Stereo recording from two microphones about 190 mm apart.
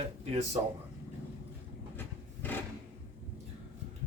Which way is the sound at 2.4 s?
10° left (ahead or behind).